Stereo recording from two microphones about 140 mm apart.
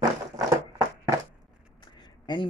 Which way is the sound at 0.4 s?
25° right (ahead or behind).